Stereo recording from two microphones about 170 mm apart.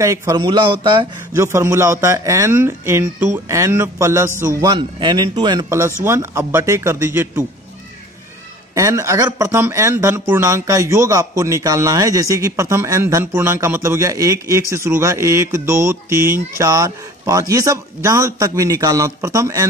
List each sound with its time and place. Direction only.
0.0 s a man's voice: 20° right (ahead or behind)
8.7 s a man's voice: 20° right (ahead or behind)